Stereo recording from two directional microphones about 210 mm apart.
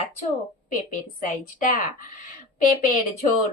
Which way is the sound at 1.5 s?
40° left (ahead or behind).